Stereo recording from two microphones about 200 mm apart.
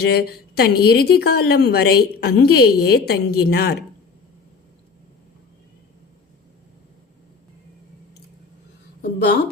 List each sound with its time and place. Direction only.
0.0 s speech: 50° left (ahead or behind)
9.0 s a woman's voice: 55° left (ahead or behind)